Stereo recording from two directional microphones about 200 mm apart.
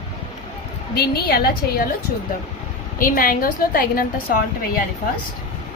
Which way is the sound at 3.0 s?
45° left (ahead or behind).